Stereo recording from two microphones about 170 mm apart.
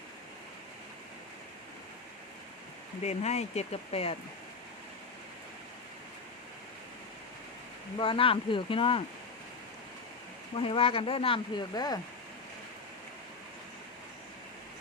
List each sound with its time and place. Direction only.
3.0 s speech: 40° left (ahead or behind)
7.9 s speech: 30° left (ahead or behind)
10.5 s speech: 30° left (ahead or behind)